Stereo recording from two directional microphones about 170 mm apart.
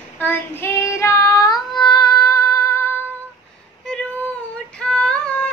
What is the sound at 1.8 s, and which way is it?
Music, 25° left (ahead or behind).